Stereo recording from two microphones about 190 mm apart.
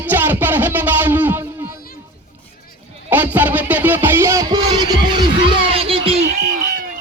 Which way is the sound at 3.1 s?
10° right (ahead or behind).